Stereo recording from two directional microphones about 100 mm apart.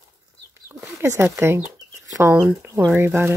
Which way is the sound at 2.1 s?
25° right (ahead or behind).